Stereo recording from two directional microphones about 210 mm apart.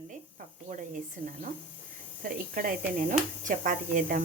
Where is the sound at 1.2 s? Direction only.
35° right (ahead or behind).